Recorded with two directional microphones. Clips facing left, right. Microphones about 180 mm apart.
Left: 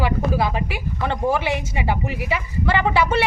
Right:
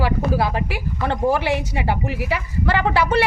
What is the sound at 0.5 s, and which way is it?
Speech, 15° left (ahead or behind).